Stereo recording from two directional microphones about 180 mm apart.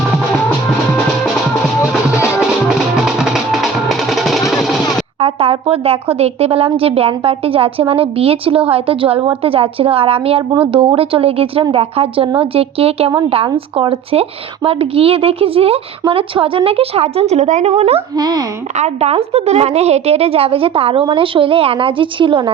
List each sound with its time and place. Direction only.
2.6 s music: 5° right (ahead or behind)
5.2 s a woman's voice: 35° right (ahead or behind)
18.1 s a child's voice: 20° right (ahead or behind)
18.8 s a woman's voice: 35° right (ahead or behind)